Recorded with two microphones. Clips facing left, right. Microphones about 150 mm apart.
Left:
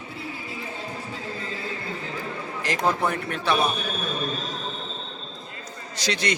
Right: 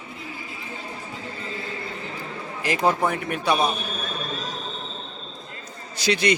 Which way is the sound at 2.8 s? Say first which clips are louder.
Right 2 dB; 10° right (ahead or behind).